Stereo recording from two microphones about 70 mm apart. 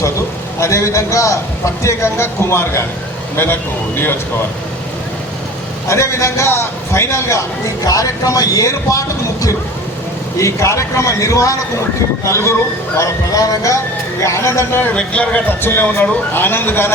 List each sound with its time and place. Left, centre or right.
0.6 s a man's voice: left
5.9 s a man's voice: left
7.9 s a man's voice: left
13.3 s speech: left
14.2 s a man's voice: left
14.8 s speech: centre
15.4 s a man's voice: left